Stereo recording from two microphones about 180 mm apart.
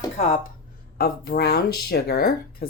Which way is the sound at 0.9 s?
55° left (ahead or behind).